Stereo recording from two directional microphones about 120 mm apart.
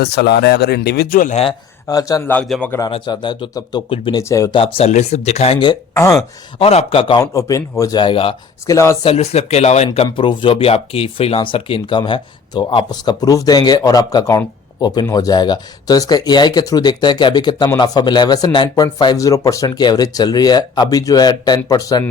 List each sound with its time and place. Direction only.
1.9 s a man's voice: 30° left (ahead or behind)
2.3 s a man's voice: 10° left (ahead or behind)
2.9 s speech: 40° left (ahead or behind)
3.8 s speech: 50° left (ahead or behind)
4.2 s a man's voice: 25° left (ahead or behind)
4.5 s speech: 50° left (ahead or behind)
5.9 s speech: 25° left (ahead or behind)
6.6 s speech: 55° left (ahead or behind)
7.2 s speech: 30° left (ahead or behind); by 8.4 s 45° left (ahead or behind)
8.6 s a man's voice: 25° left (ahead or behind)
9.0 s speech: 60° left (ahead or behind); by 22.0 s 30° left (ahead or behind)